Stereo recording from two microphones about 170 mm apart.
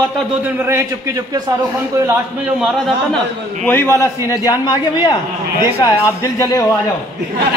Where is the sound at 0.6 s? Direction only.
20° right (ahead or behind).